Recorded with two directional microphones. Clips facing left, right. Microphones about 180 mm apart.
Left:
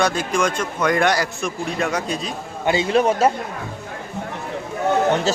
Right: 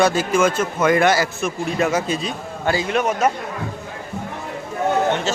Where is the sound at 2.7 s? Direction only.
25° left (ahead or behind).